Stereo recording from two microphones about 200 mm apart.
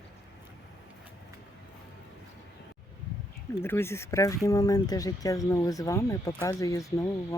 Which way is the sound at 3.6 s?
10° left (ahead or behind).